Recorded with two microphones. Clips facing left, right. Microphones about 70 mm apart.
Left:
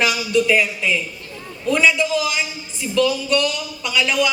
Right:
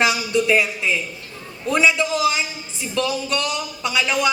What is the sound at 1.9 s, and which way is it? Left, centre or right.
A man's voice, right.